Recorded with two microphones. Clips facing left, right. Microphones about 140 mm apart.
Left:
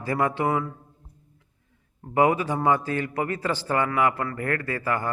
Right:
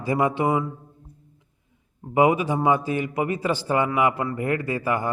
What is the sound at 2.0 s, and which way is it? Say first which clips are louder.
A man's voice: right 2 dB; 15° right (ahead or behind).